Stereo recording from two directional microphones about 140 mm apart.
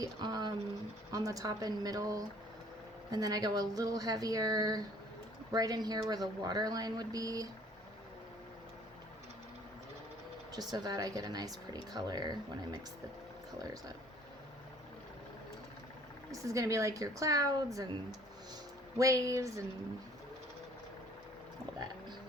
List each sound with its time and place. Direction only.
0.0 s speech: 30° right (ahead or behind)
10.5 s speech: 30° right (ahead or behind)
16.3 s speech: 25° right (ahead or behind)
18.9 s speech: 25° right (ahead or behind)